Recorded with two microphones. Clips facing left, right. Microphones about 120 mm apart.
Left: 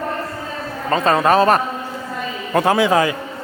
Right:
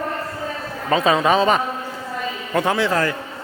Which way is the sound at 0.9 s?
5° right (ahead or behind).